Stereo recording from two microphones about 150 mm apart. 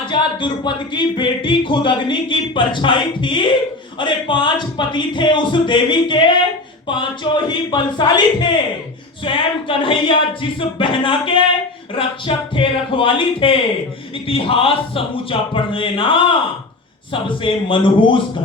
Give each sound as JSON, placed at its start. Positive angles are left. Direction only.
{"t": 0.0, "sound": "speech", "side_deg": 30}